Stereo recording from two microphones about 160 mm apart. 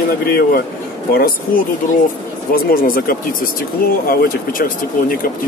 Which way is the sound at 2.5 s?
65° left (ahead or behind).